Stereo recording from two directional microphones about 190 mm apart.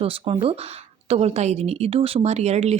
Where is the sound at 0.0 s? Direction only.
30° right (ahead or behind).